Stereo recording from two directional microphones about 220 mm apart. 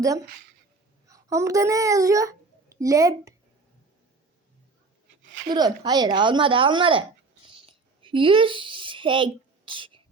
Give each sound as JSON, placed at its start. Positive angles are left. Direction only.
{"t": 1.0, "sound": "a child's voice", "side_deg": -15}
{"t": 5.5, "sound": "a woman's voice", "side_deg": -20}
{"t": 7.4, "sound": "a sound", "side_deg": -25}